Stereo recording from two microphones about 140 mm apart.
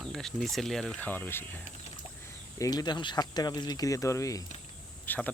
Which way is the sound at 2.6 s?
30° left (ahead or behind).